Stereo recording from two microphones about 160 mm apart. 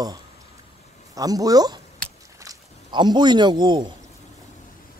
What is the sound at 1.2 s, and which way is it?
A man's voice, 25° right (ahead or behind).